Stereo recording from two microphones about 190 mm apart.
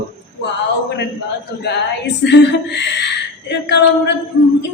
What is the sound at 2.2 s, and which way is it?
Speech, 65° left (ahead or behind).